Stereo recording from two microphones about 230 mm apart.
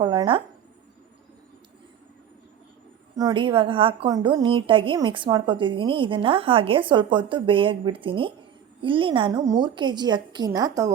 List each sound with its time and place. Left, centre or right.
0.0 s speech: right
3.2 s a woman's voice: centre